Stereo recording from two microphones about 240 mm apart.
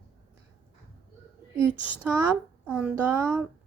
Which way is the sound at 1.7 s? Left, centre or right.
Centre.